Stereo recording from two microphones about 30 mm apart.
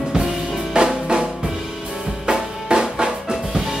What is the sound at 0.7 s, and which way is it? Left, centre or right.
Drum, right.